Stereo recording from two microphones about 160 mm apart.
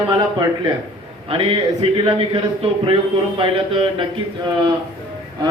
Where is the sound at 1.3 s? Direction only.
35° right (ahead or behind).